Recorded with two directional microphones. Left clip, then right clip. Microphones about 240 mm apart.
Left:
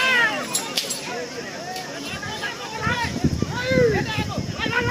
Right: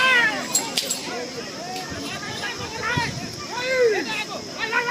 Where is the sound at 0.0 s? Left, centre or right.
Centre.